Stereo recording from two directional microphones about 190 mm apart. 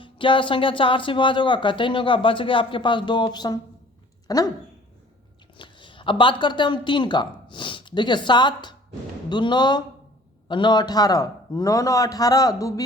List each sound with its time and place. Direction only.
0.0 s speech: 25° left (ahead or behind)
5.5 s speech: 25° left (ahead or behind)